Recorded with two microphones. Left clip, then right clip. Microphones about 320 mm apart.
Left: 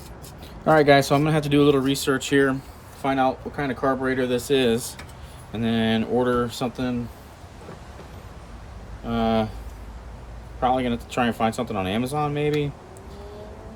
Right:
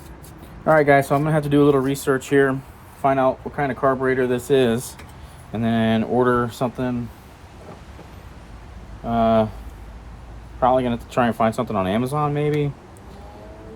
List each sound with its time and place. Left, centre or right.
0.6 s speech: centre
9.0 s speech: centre
10.6 s speech: centre